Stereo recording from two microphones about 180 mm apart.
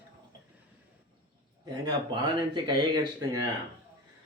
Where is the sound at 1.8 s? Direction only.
25° right (ahead or behind).